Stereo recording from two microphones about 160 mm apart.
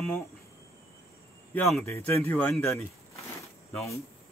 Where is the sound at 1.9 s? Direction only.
10° left (ahead or behind).